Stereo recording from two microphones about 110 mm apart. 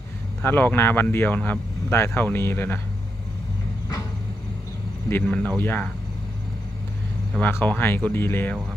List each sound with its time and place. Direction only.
0.4 s speech: 20° left (ahead or behind)
5.2 s speech: 10° left (ahead or behind)
7.4 s speech: 15° left (ahead or behind)